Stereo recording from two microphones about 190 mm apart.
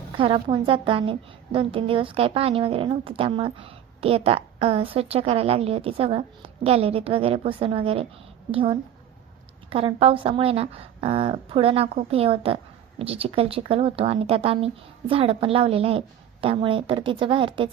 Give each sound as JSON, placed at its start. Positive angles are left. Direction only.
{"t": 0.2, "sound": "a woman's voice", "side_deg": -30}